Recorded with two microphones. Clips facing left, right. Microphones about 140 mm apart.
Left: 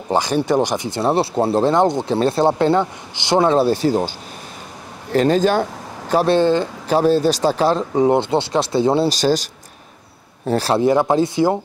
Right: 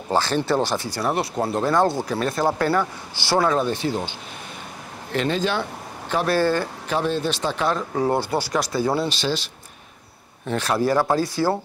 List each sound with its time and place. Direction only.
0.1 s speech: 15° left (ahead or behind); by 4.1 s 40° left (ahead or behind)
5.1 s speech: 40° left (ahead or behind)
6.2 s speech: 20° left (ahead or behind)
6.9 s speech: 40° left (ahead or behind)
7.9 s speech: 20° left (ahead or behind)
9.1 s speech: 40° left (ahead or behind)
10.8 s speech: 20° left (ahead or behind)